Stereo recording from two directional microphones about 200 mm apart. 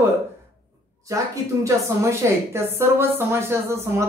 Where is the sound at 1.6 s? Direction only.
15° right (ahead or behind).